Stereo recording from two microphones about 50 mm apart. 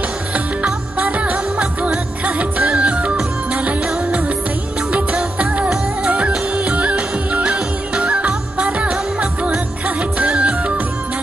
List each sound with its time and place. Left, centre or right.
0.9 s music: right
4.9 s music: right
7.4 s music: centre
8.2 s music: right